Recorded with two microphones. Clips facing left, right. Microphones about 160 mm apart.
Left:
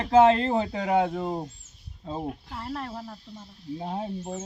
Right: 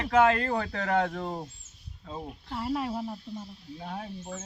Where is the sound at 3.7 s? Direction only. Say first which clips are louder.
Left 6 dB; 25° left (ahead or behind).